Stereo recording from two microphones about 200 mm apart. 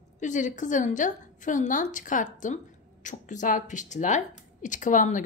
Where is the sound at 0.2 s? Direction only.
40° left (ahead or behind).